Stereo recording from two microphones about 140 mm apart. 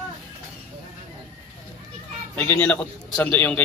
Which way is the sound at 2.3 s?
10° left (ahead or behind).